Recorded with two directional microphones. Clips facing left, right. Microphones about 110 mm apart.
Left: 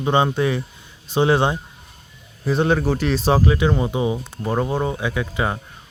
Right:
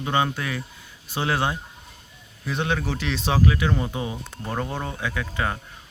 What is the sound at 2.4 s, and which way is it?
Speech, 35° left (ahead or behind).